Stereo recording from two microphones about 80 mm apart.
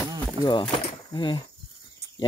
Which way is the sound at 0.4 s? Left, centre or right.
Left.